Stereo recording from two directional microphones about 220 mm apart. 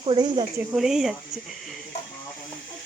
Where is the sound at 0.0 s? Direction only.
20° right (ahead or behind).